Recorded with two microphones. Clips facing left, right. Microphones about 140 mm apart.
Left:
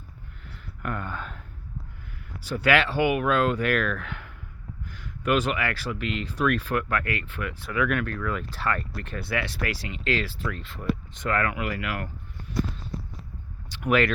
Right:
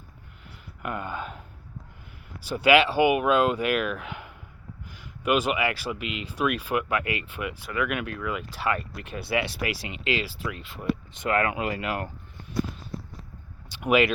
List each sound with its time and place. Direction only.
0.8 s speech: 10° right (ahead or behind)
2.5 s speech: 15° right (ahead or behind)
7.6 s speech: 5° right (ahead or behind); by 12.1 s 25° right (ahead or behind)
13.7 s speech: 15° right (ahead or behind)